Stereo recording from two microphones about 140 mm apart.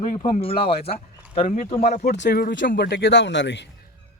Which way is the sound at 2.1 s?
75° left (ahead or behind).